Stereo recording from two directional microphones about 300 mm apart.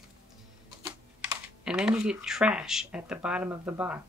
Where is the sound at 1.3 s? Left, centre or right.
Centre.